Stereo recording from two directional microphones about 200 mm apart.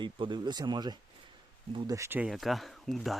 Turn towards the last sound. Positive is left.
turn(degrees=0)  # may be behind; listen again after turning